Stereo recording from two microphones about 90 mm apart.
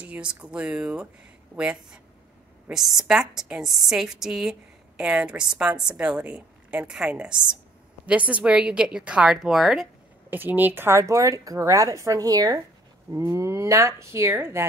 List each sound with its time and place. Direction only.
0.0 s a woman's voice: 15° right (ahead or behind)
10.3 s speech: 20° right (ahead or behind); by 12.6 s 45° right (ahead or behind)
13.1 s speech: 30° right (ahead or behind)